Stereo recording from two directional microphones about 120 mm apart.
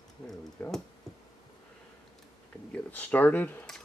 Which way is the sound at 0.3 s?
5° left (ahead or behind).